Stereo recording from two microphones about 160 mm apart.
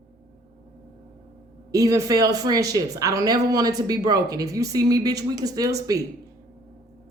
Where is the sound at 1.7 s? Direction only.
20° right (ahead or behind).